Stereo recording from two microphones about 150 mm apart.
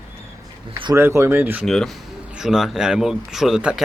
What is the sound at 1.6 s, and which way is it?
Speech, centre (ahead or behind).